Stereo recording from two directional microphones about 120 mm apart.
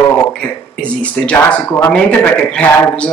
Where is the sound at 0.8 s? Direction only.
10° left (ahead or behind).